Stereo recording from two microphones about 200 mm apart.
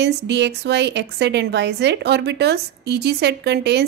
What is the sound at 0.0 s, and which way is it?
A woman's voice, 60° right (ahead or behind).